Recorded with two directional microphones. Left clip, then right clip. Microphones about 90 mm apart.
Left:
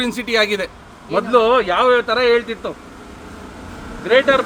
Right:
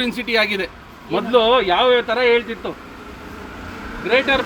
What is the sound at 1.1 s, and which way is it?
Speech, 35° left (ahead or behind).